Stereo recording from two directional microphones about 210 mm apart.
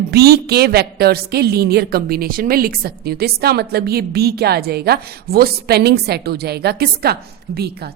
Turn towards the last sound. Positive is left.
turn(degrees=-50)  # may be behind; listen again after turning